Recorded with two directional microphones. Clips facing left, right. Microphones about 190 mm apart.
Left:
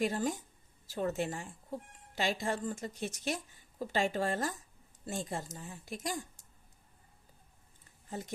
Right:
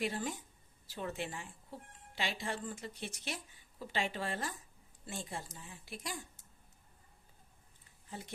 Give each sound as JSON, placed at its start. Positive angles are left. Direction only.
{"t": 0.0, "sound": "a woman's voice", "side_deg": 45}
{"t": 8.1, "sound": "a woman's voice", "side_deg": 40}